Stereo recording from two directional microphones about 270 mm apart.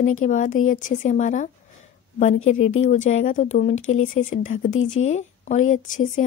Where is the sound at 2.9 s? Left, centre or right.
Left.